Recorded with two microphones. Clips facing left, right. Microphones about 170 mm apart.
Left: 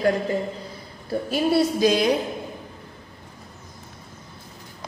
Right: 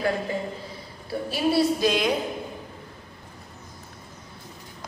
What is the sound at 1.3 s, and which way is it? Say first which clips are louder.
Speech: left 1 dB; 40° left (ahead or behind).